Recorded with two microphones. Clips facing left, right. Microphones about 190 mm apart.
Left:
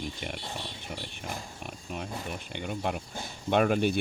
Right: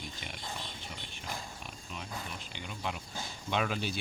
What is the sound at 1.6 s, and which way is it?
Speech, 55° left (ahead or behind).